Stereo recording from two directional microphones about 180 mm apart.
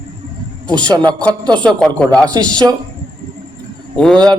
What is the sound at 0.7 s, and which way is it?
Speech, 25° right (ahead or behind).